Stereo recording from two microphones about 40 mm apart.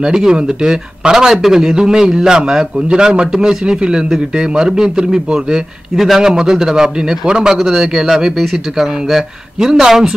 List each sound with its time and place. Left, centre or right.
0.0 s a man's voice: centre
7.5 s a man's voice: centre